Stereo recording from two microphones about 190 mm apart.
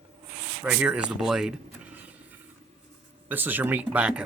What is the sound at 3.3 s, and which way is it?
Speech, 10° right (ahead or behind).